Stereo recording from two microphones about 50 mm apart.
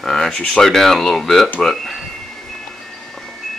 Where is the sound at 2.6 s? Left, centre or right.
Centre.